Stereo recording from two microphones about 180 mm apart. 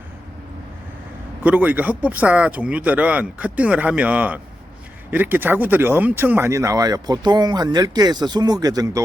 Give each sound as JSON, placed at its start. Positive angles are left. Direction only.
{"t": 1.5, "sound": "speech", "side_deg": -10}